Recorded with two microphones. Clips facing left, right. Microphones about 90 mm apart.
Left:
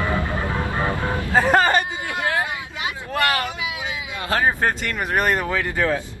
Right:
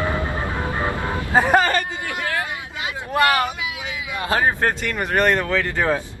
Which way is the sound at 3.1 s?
20° right (ahead or behind).